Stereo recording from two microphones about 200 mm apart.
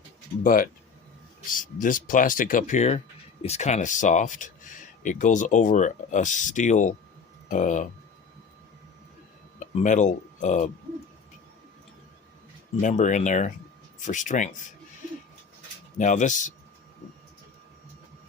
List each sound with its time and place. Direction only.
0.4 s speech: 45° left (ahead or behind)
9.6 s speech: 40° left (ahead or behind)
12.8 s speech: 35° left (ahead or behind)
16.0 s speech: 40° left (ahead or behind)